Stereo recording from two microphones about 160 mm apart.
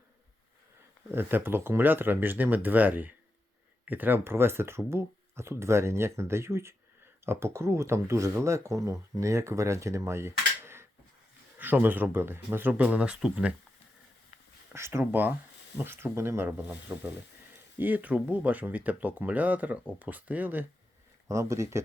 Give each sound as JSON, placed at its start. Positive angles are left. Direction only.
{"t": 1.1, "sound": "speech", "side_deg": -15}
{"t": 14.7, "sound": "speech", "side_deg": -15}